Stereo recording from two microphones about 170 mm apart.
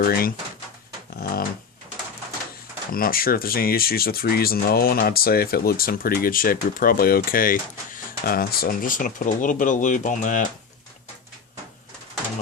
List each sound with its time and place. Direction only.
0.0 s speech: 60° left (ahead or behind)
1.2 s dog: 60° left (ahead or behind)
2.9 s speech: 60° left (ahead or behind)